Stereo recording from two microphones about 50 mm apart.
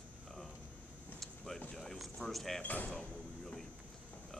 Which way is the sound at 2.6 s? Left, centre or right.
Left.